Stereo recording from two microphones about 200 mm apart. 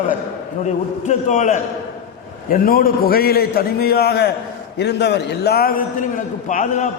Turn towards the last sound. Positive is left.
turn(degrees=40)  # may be behind; listen again after turning